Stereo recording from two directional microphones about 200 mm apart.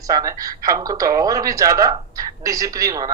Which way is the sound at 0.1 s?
15° right (ahead or behind).